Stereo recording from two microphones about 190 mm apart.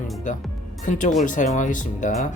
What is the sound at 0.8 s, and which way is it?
Speech, 40° left (ahead or behind).